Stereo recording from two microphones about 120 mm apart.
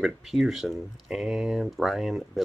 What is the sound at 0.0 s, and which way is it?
Speech, centre (ahead or behind).